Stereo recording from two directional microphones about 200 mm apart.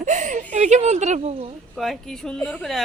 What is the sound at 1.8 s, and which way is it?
Speech, centre (ahead or behind).